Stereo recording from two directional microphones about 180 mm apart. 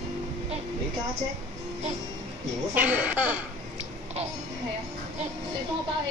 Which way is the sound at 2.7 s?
10° right (ahead or behind).